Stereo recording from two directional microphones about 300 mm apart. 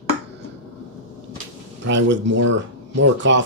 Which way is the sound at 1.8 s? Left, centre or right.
Right.